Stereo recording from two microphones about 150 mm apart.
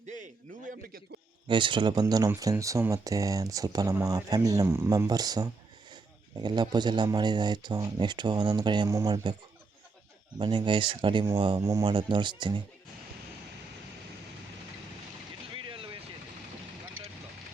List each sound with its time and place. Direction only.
1.5 s speech: 35° right (ahead or behind)
10.3 s speech: 30° right (ahead or behind)
15.5 s a sound: 35° right (ahead or behind)